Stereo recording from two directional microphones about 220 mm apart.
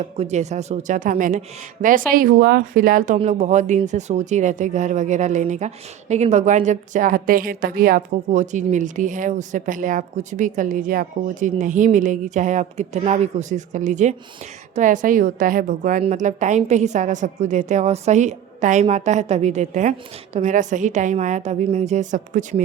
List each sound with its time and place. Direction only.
0.0 s speech: 30° right (ahead or behind)